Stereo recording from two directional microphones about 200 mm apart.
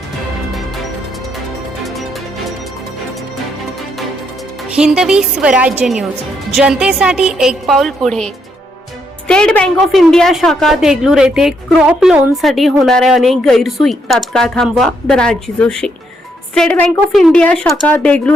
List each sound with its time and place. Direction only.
1.8 s music: centre (ahead or behind)
4.8 s a woman's voice: 5° right (ahead or behind)